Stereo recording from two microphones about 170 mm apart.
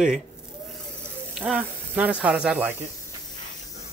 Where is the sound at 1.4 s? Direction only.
5° right (ahead or behind).